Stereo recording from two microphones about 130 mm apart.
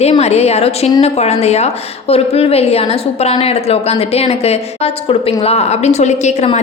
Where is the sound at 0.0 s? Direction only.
55° left (ahead or behind).